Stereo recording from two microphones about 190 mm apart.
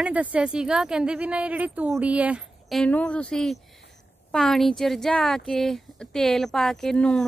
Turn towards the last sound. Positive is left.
turn(degrees=5)  # may be behind; listen again after turning